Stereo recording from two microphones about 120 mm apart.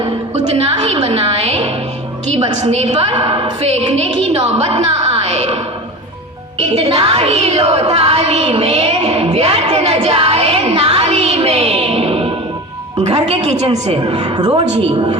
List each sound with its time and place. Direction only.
0.0 s a sound: 60° right (ahead or behind)
1.0 s music: 55° right (ahead or behind)
2.3 s a woman's voice: 65° right (ahead or behind)
3.2 s a woman's voice: 45° right (ahead or behind); by 5.5 s 60° right (ahead or behind)
6.6 s a woman's voice: 60° right (ahead or behind)
14.3 s a woman's voice: 40° right (ahead or behind)
14.7 s a woman's voice: 55° right (ahead or behind)